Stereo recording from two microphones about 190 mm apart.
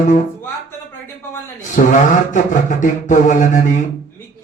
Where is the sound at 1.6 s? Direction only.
40° left (ahead or behind).